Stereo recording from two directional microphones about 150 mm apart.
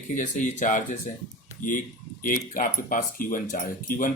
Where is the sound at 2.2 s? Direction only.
65° left (ahead or behind).